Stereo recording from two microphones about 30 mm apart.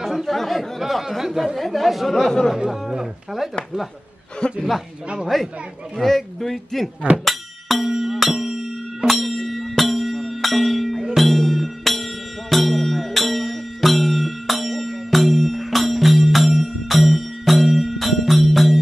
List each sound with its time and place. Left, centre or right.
0.0 s chatter: centre
0.7 s a man's voice: centre
1.6 s a man's voice: centre
2.7 s speech: centre
4.4 s speech: left
5.3 s a man's voice: centre
7.2 s music: centre
7.9 s music: centre